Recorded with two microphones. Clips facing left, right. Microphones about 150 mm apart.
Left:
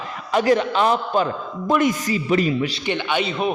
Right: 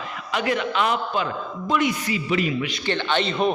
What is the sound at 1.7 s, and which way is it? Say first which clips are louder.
A man's voice: left 4 dB; 45° left (ahead or behind).